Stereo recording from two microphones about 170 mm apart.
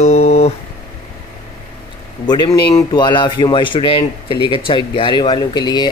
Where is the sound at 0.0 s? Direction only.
40° left (ahead or behind).